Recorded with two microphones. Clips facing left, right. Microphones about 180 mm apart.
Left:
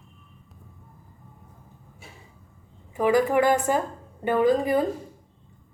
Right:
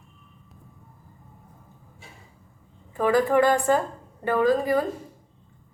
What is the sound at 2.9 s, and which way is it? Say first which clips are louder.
A woman's voice: even; 10° left (ahead or behind).